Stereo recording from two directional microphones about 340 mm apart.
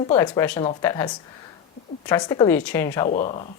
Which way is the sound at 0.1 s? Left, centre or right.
Centre.